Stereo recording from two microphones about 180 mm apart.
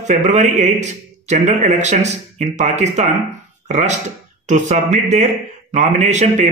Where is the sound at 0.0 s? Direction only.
40° right (ahead or behind).